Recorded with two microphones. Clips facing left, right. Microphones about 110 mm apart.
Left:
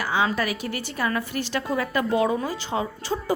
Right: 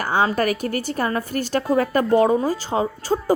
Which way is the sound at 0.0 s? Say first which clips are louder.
Right 4 dB; 45° right (ahead or behind).